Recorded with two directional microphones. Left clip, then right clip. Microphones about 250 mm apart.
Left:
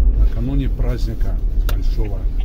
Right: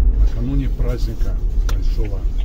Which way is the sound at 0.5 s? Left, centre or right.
Left.